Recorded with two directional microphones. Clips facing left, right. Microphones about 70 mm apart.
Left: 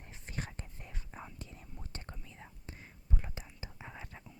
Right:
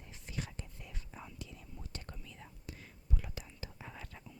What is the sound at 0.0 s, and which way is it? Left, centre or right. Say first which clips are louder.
Whispering: left 1 dB; left.